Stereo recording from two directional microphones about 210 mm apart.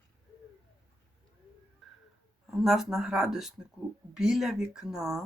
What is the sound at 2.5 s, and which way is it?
Speech, centre (ahead or behind).